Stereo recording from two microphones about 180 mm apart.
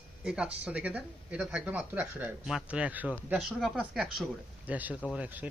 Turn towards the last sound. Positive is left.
turn(degrees=-10)  # may be behind; listen again after turning